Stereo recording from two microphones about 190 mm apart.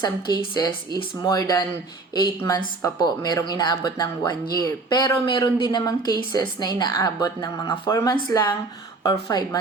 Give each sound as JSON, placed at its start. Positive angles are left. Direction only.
{"t": 0.5, "sound": "speech", "side_deg": 20}